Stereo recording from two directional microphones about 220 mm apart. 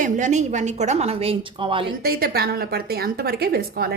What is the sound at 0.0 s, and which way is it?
A woman's voice, 35° right (ahead or behind).